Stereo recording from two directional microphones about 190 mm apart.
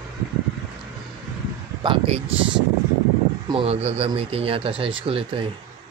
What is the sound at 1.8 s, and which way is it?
Speech, 30° right (ahead or behind).